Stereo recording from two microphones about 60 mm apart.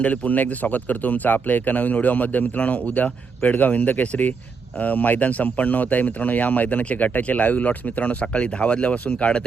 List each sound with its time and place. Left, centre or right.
0.0 s speech: left